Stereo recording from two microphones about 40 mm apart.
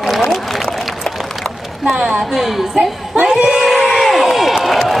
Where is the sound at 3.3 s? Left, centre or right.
Centre.